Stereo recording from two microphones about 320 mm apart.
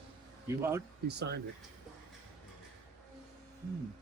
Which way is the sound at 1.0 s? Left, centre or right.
Right.